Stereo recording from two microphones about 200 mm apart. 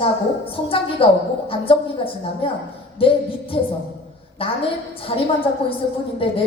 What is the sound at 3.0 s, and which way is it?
A woman's voice, 25° left (ahead or behind).